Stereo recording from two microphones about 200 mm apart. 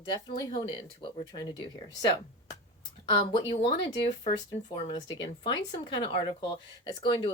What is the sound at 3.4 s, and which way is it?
Speech, 30° left (ahead or behind).